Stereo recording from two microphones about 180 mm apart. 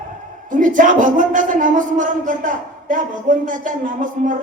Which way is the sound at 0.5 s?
45° right (ahead or behind).